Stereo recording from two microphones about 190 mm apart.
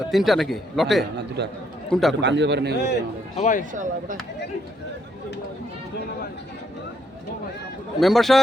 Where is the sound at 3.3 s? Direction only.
40° left (ahead or behind).